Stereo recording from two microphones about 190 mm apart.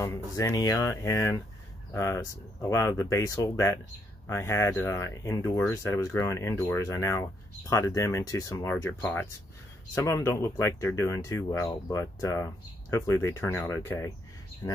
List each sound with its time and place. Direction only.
0.0 s speech: 15° left (ahead or behind)